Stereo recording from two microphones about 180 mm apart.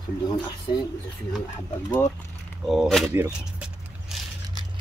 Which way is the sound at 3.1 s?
5° right (ahead or behind).